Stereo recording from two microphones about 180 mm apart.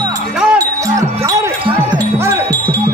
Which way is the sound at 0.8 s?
20° right (ahead or behind).